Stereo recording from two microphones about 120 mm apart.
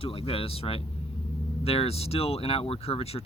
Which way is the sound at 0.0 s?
55° left (ahead or behind).